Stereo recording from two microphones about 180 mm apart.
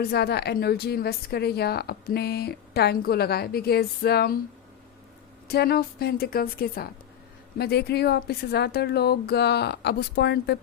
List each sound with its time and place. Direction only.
0.0 s a woman's voice: 65° left (ahead or behind)
5.5 s a woman's voice: 60° left (ahead or behind)